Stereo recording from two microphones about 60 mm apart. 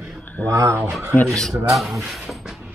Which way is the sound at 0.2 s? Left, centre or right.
Left.